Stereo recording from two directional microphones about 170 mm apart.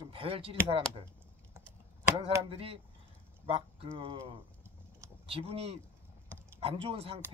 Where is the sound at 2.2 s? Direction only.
35° right (ahead or behind).